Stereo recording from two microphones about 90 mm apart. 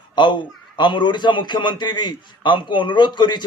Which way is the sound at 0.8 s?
60° left (ahead or behind).